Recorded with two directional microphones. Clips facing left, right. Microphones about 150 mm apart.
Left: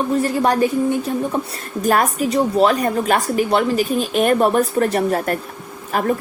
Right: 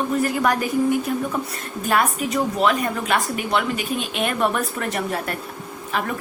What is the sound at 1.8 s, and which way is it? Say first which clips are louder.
A woman's voice: left 4 dB; 40° left (ahead or behind).